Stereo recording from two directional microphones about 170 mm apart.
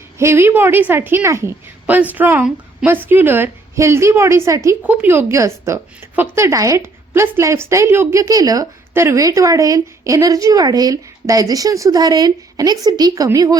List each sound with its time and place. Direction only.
0.2 s a woman's voice: 15° right (ahead or behind)